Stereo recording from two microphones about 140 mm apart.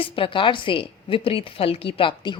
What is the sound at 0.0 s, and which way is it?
A woman's voice, 40° left (ahead or behind).